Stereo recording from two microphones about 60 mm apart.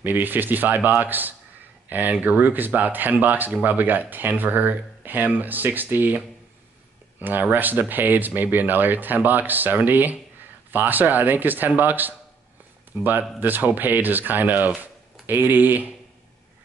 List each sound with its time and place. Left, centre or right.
0.0 s speech: right